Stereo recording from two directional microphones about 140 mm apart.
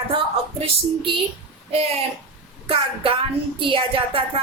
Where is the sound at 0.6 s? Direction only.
40° right (ahead or behind).